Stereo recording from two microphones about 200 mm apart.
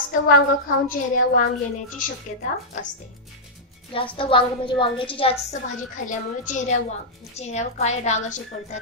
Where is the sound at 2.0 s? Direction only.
40° left (ahead or behind).